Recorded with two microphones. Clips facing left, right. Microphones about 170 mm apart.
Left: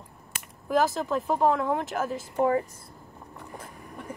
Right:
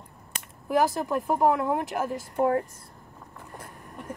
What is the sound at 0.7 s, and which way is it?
Speech, 10° right (ahead or behind).